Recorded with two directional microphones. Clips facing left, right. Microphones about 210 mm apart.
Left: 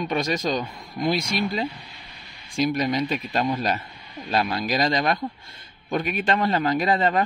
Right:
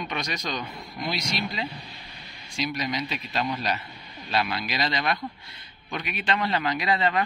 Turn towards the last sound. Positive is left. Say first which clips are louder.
# left 4 dB
turn(degrees=45)  # may be behind; listen again after turning